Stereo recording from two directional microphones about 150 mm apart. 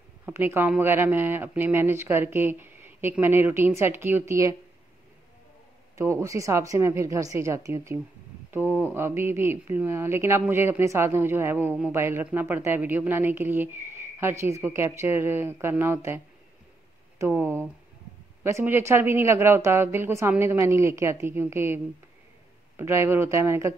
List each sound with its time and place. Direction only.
0.2 s speech: 15° right (ahead or behind)
5.9 s a woman's voice: 20° right (ahead or behind)
17.2 s speech: 15° right (ahead or behind)